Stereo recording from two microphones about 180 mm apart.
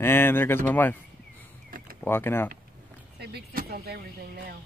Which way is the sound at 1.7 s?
50° right (ahead or behind).